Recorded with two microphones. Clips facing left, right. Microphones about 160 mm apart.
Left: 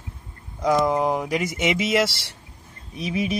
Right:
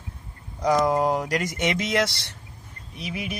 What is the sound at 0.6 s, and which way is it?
Speech, centre (ahead or behind).